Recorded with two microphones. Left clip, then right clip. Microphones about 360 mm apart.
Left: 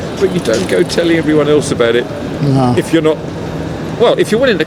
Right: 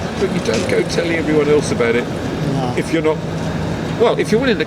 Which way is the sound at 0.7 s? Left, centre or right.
Left.